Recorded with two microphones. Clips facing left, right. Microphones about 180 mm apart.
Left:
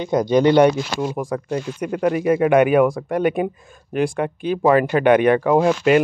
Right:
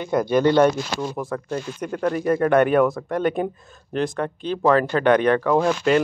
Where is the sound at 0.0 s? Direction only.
20° left (ahead or behind).